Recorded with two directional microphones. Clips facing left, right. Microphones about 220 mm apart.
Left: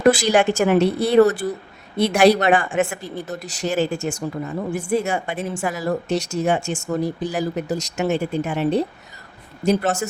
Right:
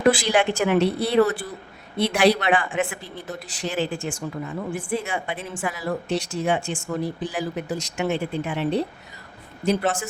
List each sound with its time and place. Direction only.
0.0 s a woman's voice: 45° left (ahead or behind)